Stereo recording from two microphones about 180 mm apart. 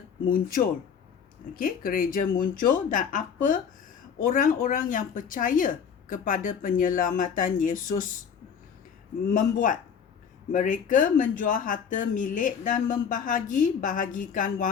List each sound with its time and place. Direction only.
0.3 s speech: 50° left (ahead or behind)
9.2 s speech: 50° left (ahead or behind)